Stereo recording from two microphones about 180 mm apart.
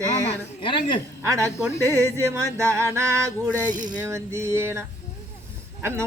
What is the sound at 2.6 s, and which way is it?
Speech, 15° right (ahead or behind).